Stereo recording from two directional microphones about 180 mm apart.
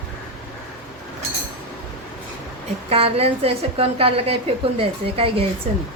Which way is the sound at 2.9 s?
35° right (ahead or behind).